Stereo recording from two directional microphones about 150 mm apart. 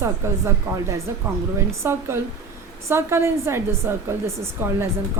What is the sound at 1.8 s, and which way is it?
A woman's voice, 15° right (ahead or behind).